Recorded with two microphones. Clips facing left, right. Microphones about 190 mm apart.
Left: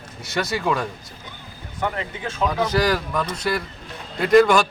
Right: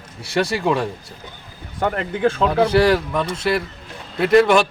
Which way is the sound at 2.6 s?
30° right (ahead or behind).